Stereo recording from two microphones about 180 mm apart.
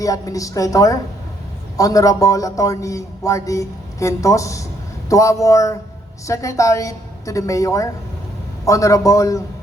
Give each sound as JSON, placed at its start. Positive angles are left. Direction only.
{"t": 0.0, "sound": "a woman's voice", "side_deg": 20}